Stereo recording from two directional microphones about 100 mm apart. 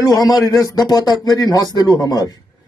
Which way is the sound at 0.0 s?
40° left (ahead or behind).